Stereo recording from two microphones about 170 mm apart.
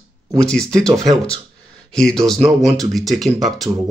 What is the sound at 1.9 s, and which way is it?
Speech, 5° left (ahead or behind).